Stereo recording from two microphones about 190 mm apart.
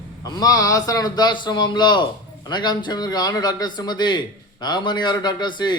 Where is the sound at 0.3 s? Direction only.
20° left (ahead or behind).